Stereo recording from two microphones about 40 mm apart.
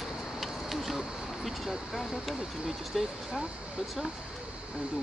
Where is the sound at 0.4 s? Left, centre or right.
Centre.